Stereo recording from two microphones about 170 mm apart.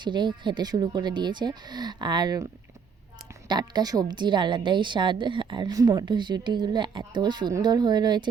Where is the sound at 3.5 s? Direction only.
25° right (ahead or behind).